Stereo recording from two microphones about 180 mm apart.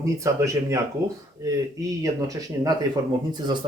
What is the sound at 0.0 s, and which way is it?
Speech, 15° right (ahead or behind).